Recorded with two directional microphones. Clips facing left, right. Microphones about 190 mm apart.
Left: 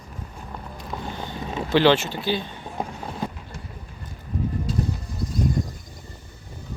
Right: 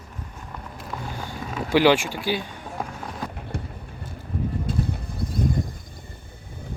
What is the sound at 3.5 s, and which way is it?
Vehicle, 65° right (ahead or behind).